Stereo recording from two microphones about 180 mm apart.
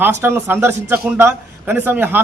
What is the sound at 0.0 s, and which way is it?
A man's voice, 15° right (ahead or behind).